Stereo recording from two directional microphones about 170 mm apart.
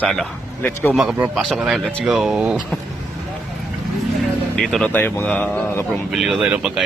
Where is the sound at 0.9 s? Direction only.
5° right (ahead or behind).